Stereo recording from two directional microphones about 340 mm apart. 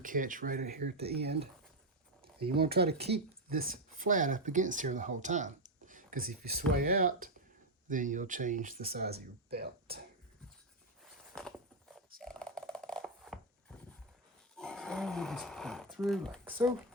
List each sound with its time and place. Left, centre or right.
0.0 s speech: right
12.2 s a sound: centre
14.5 s roar: centre